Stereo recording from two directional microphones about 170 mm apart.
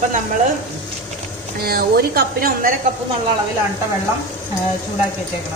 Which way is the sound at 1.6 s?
65° right (ahead or behind).